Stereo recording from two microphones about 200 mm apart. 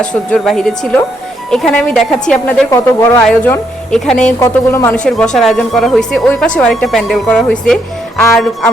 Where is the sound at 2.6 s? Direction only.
15° left (ahead or behind).